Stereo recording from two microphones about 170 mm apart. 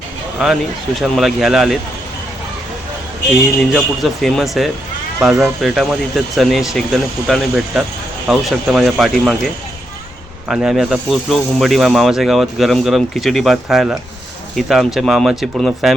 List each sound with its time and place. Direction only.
0.9 s speech: centre (ahead or behind)
3.7 s speech: centre (ahead or behind)
10.5 s speech: 5° right (ahead or behind)